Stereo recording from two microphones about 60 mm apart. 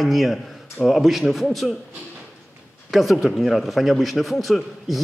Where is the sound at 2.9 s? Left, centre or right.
Centre.